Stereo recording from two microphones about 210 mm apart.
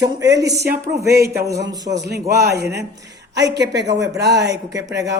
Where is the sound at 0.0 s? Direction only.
55° right (ahead or behind).